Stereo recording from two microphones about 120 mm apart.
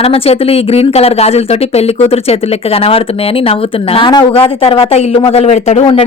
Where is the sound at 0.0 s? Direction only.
55° left (ahead or behind).